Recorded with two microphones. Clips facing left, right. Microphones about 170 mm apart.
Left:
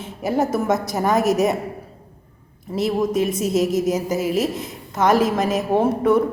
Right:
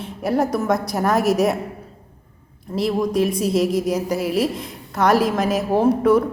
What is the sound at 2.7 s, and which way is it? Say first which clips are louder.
A woman's voice: even; 10° left (ahead or behind).